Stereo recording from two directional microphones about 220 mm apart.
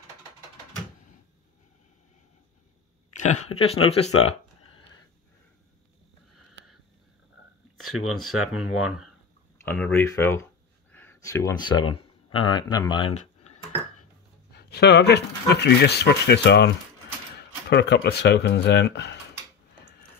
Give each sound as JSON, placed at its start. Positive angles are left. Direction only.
{"t": 3.2, "sound": "speech", "side_deg": 30}
{"t": 4.2, "sound": "a sound", "side_deg": 25}
{"t": 8.1, "sound": "speech", "side_deg": 0}
{"t": 8.6, "sound": "speech", "side_deg": 75}
{"t": 9.6, "sound": "speech", "side_deg": 5}
{"t": 13.1, "sound": "a sound", "side_deg": 30}
{"t": 14.5, "sound": "speech", "side_deg": 45}